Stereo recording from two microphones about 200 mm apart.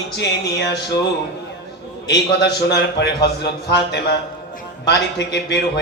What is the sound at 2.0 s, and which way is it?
A man's voice, 55° left (ahead or behind).